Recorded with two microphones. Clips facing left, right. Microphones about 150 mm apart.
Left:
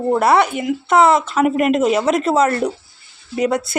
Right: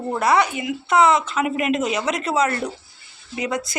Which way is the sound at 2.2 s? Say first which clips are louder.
Left 3 dB; 5° left (ahead or behind).